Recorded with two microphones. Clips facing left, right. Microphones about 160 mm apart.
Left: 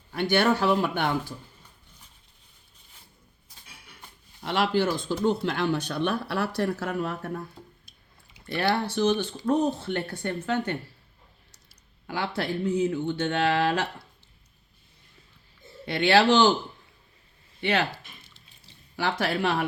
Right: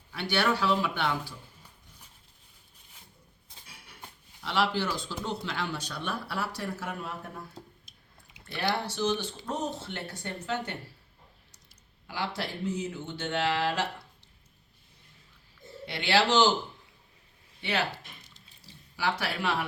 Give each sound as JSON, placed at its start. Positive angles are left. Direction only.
{"t": 0.1, "sound": "speech", "side_deg": 50}
{"t": 4.4, "sound": "speech", "side_deg": 50}
{"t": 8.5, "sound": "speech", "side_deg": 60}
{"t": 12.0, "sound": "speech", "side_deg": 55}
{"t": 15.9, "sound": "speech", "side_deg": 55}
{"t": 17.6, "sound": "speech", "side_deg": 60}
{"t": 18.9, "sound": "speech", "side_deg": 55}